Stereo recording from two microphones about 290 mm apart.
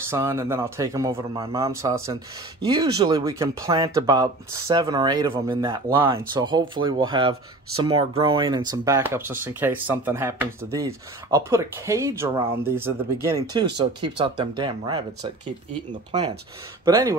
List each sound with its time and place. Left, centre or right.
0.1 s speech: centre
16.1 s speech: right